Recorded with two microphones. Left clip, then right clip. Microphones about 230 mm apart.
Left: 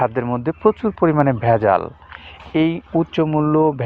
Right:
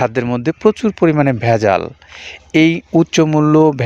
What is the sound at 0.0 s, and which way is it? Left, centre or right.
Speech, right.